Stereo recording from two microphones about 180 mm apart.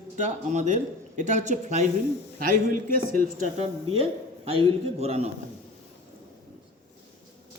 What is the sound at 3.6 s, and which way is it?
A man's voice, 30° right (ahead or behind).